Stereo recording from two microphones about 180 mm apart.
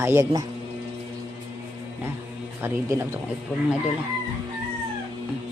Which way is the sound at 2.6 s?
15° right (ahead or behind).